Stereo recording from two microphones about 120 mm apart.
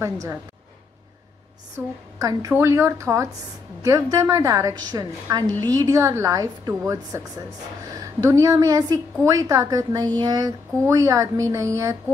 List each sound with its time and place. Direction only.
0.0 s a woman's voice: 25° right (ahead or behind)
2.1 s a woman's voice: 30° right (ahead or behind)